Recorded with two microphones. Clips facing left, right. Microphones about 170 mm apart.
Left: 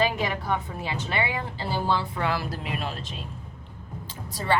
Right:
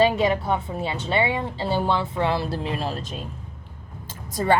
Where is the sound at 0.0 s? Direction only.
25° right (ahead or behind).